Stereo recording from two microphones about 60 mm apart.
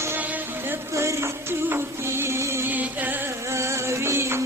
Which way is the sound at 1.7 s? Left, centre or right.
Right.